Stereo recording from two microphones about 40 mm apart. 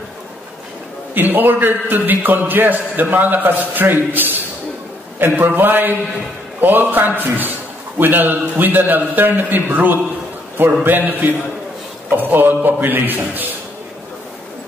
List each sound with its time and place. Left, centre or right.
1.1 s a man's voice: right